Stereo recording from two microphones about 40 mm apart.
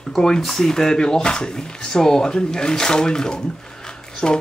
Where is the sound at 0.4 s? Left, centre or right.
Centre.